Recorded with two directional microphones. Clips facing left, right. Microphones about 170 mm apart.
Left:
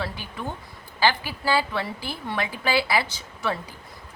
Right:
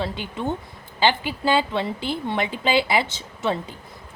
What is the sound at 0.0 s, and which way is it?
A woman's voice, 20° right (ahead or behind).